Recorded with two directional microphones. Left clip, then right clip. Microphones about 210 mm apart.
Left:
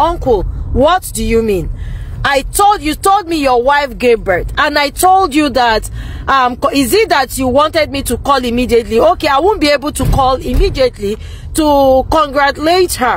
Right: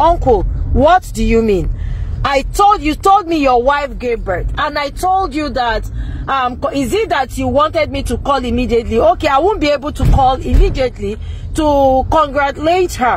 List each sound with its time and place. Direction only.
0.0 s speech: 5° left (ahead or behind)
4.0 s speech: 30° left (ahead or behind); by 13.1 s 10° left (ahead or behind)